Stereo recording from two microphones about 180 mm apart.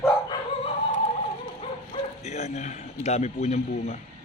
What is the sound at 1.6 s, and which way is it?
Bow-wow, 40° left (ahead or behind).